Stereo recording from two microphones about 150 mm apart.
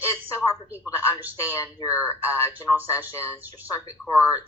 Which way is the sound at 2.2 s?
10° right (ahead or behind).